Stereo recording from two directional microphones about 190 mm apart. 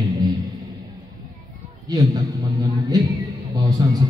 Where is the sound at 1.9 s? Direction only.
20° right (ahead or behind).